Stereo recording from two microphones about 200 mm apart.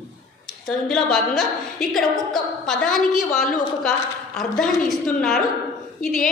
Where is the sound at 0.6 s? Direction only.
Centre (ahead or behind).